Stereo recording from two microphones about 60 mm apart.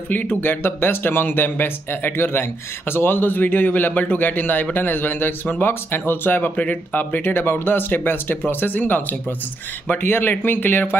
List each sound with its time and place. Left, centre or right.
0.1 s a man's voice: left
10.0 s a man's voice: left